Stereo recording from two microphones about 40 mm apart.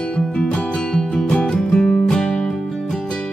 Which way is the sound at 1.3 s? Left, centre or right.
Left.